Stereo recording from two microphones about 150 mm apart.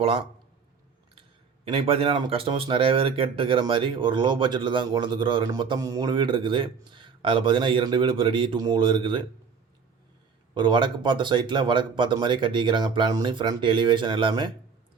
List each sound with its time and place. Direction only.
0.0 s a man's voice: 40° right (ahead or behind)
1.7 s speech: 40° right (ahead or behind)
10.5 s speech: 30° right (ahead or behind)